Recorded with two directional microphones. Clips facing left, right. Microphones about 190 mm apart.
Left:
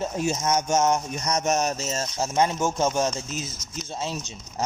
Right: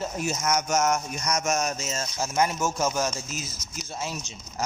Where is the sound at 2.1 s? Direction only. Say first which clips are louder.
Left 2 dB; 30° left (ahead or behind).